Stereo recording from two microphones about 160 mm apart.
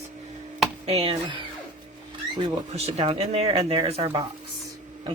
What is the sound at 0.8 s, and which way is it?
Speech, 40° right (ahead or behind).